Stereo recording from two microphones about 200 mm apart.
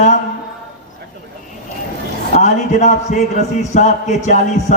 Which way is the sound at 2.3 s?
35° left (ahead or behind).